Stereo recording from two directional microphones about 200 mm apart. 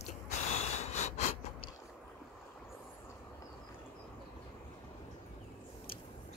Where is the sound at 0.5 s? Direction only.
35° left (ahead or behind).